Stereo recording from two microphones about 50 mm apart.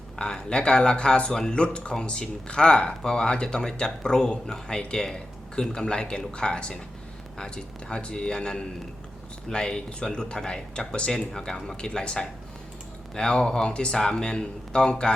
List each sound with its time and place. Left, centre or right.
0.2 s speech: centre